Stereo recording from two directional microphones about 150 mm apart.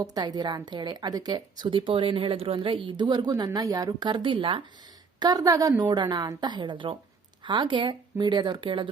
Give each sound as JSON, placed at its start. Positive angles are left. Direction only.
{"t": 0.0, "sound": "a woman's voice", "side_deg": -25}
{"t": 5.2, "sound": "a woman's voice", "side_deg": -25}